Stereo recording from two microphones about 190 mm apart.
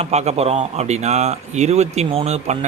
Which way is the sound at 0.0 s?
35° right (ahead or behind).